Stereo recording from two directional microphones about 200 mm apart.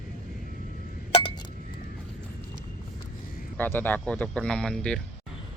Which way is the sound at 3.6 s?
10° left (ahead or behind).